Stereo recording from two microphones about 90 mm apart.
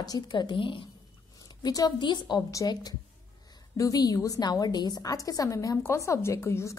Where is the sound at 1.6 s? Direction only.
45° left (ahead or behind).